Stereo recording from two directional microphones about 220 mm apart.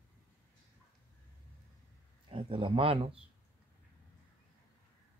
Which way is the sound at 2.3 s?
25° right (ahead or behind).